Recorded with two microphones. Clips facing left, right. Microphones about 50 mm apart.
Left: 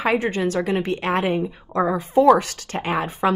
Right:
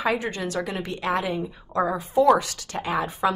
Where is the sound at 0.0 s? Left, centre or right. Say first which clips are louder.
Left 5 dB; left.